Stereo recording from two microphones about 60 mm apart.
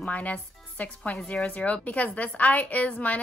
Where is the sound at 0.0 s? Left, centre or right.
Left.